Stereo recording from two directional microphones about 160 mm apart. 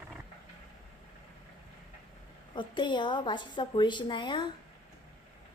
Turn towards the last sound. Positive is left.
turn(degrees=30)  # may be behind; listen again after turning